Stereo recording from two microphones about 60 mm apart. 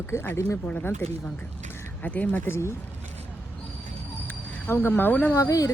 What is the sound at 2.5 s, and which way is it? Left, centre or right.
Speech, left.